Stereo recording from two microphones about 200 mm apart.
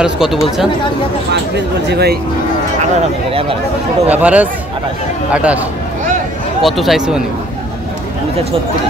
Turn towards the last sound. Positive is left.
turn(degrees=-5)  # may be behind; listen again after turning